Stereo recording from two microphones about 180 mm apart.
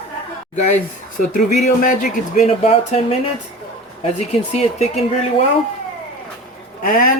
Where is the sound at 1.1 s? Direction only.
45° left (ahead or behind).